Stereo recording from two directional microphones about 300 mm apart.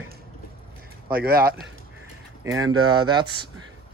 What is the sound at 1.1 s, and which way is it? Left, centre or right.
Speech, right.